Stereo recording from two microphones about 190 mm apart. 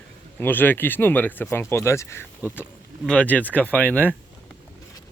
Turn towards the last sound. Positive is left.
turn(degrees=10)  # may be behind; listen again after turning